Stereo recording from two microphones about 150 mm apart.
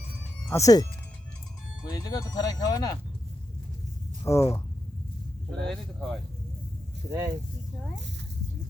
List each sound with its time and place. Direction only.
0.5 s speech: 25° left (ahead or behind)
1.9 s speech: 25° left (ahead or behind)
4.3 s speech: 20° left (ahead or behind)
5.5 s speech: centre (ahead or behind)
7.1 s speech: 15° right (ahead or behind)